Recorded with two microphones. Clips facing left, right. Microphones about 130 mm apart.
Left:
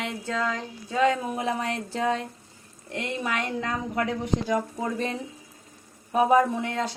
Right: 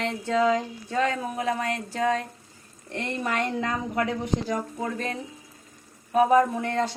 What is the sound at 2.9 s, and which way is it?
Speech, 10° left (ahead or behind).